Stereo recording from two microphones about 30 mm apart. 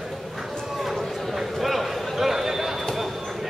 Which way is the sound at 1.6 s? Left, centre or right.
Centre.